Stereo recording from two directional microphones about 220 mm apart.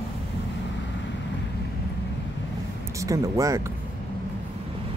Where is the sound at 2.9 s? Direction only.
15° right (ahead or behind).